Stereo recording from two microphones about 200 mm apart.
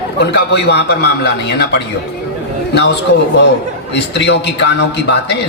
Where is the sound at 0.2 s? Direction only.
60° left (ahead or behind).